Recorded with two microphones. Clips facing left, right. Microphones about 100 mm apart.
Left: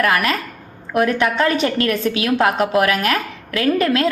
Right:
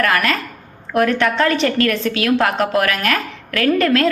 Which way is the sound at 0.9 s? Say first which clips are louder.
Right 1 dB; 20° left (ahead or behind).